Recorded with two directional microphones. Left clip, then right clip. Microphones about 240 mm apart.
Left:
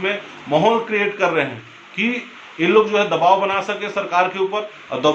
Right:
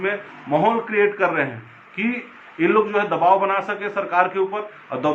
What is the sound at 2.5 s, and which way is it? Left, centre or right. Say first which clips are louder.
A man's voice: left 3 dB; left.